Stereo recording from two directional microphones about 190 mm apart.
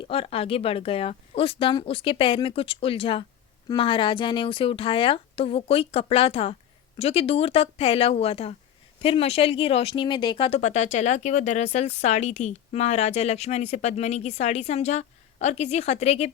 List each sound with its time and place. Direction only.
0.0 s speech: 30° left (ahead or behind)